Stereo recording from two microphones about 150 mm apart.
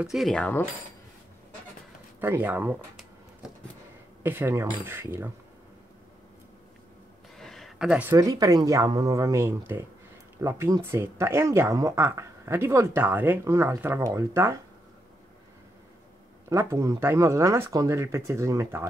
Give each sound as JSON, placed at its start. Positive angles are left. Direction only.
{"t": 0.0, "sound": "speech", "side_deg": 0}
{"t": 2.1, "sound": "a sound", "side_deg": -15}
{"t": 4.2, "sound": "speech", "side_deg": -15}
{"t": 7.3, "sound": "a sound", "side_deg": 0}
{"t": 8.2, "sound": "speech", "side_deg": -25}
{"t": 16.4, "sound": "speech", "side_deg": -20}